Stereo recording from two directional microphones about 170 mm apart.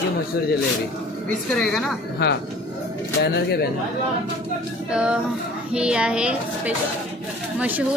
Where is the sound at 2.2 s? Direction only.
75° left (ahead or behind).